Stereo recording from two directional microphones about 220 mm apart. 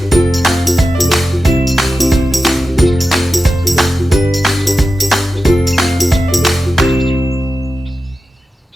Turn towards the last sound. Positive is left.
turn(degrees=15)  # may be behind; listen again after turning